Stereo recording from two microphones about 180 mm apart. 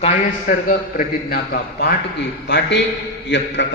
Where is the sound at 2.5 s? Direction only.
80° left.